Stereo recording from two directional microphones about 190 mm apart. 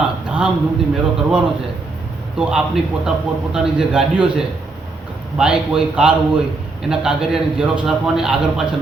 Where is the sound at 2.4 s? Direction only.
5° right (ahead or behind).